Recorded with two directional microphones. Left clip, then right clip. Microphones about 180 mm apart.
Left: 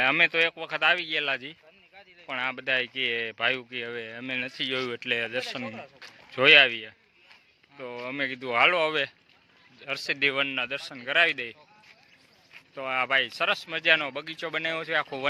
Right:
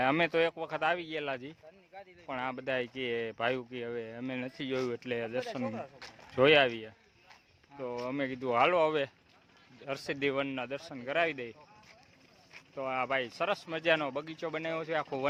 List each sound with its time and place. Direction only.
0.0 s speech: 20° right (ahead or behind)
12.5 s speech: centre (ahead or behind)
13.6 s speech: 20° right (ahead or behind)